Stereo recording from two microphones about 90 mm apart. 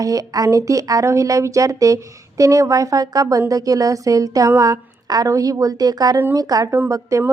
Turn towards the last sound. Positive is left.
turn(degrees=-35)  # may be behind; listen again after turning